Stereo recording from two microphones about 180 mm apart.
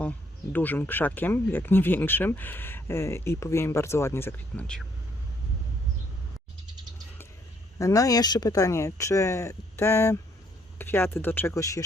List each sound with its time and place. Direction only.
0.0 s speech: 10° left (ahead or behind)
7.8 s speech: 20° left (ahead or behind)